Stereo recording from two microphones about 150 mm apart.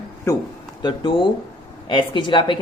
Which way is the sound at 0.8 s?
30° left (ahead or behind).